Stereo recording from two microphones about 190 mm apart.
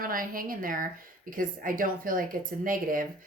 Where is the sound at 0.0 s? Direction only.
50° right (ahead or behind).